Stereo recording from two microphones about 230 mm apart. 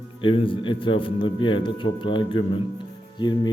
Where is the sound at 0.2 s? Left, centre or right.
Left.